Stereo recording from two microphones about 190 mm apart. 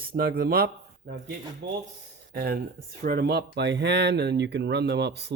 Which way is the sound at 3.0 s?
50° right (ahead or behind).